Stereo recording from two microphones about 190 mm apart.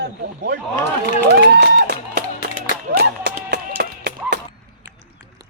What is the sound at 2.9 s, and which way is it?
Music, 60° right (ahead or behind).